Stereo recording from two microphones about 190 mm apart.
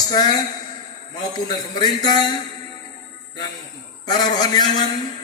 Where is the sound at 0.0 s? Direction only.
20° left (ahead or behind).